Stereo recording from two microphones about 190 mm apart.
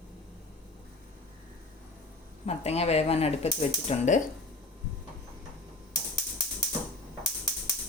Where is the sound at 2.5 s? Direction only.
35° left (ahead or behind).